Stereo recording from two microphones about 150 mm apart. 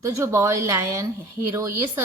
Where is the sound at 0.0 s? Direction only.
20° right (ahead or behind).